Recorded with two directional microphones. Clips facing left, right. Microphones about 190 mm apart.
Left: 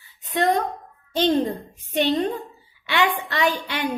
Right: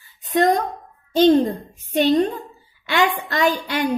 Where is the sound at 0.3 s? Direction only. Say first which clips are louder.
Right 4 dB; 40° right (ahead or behind).